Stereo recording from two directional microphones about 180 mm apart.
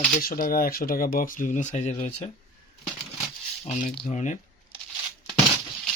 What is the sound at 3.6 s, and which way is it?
Speech, 45° left (ahead or behind).